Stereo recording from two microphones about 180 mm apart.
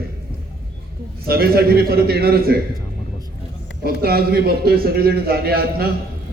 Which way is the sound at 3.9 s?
60° right (ahead or behind).